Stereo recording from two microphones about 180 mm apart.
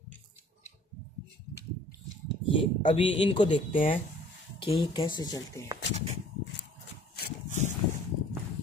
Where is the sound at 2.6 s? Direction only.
30° left (ahead or behind).